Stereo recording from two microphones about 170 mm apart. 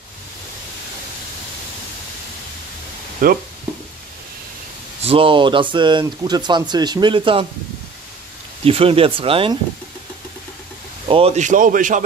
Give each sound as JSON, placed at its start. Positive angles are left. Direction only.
{"t": 3.2, "sound": "speech", "side_deg": -55}
{"t": 5.0, "sound": "speech", "side_deg": -30}
{"t": 8.6, "sound": "speech", "side_deg": -35}
{"t": 11.1, "sound": "speech", "side_deg": -35}